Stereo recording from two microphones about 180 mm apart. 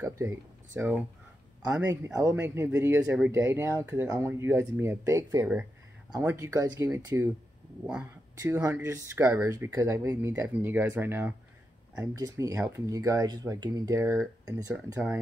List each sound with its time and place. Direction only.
0.2 s speech: 15° right (ahead or behind)
7.8 s speech: 5° right (ahead or behind)
8.4 s speech: 15° right (ahead or behind)